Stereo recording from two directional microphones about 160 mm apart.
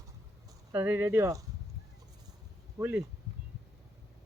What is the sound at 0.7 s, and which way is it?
Speech, 15° right (ahead or behind).